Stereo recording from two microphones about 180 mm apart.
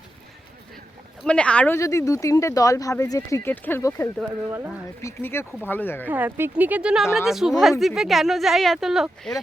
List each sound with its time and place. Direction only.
1.2 s speech: 5° left (ahead or behind)
4.2 s speech: 10° right (ahead or behind)
5.0 s speech: 15° left (ahead or behind)
6.1 s speech: 10° right (ahead or behind)